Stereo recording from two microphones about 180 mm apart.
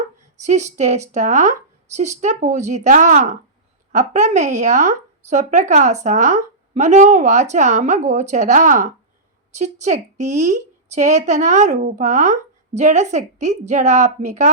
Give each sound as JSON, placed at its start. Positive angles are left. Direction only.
{"t": 0.4, "sound": "speech", "side_deg": -40}